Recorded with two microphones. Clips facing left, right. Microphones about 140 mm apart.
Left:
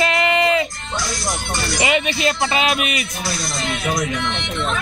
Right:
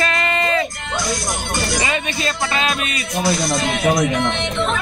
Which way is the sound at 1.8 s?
15° left (ahead or behind).